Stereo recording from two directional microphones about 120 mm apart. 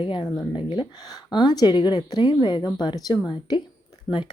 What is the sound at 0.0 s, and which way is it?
Speech, 45° left (ahead or behind).